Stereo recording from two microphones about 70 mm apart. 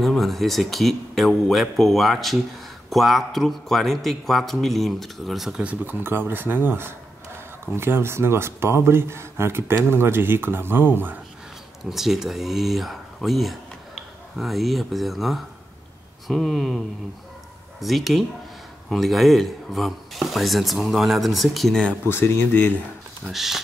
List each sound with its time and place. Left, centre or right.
0.0 s speech: centre
5.6 s speech: right
11.8 s speech: centre
22.1 s speech: left
23.2 s speech: centre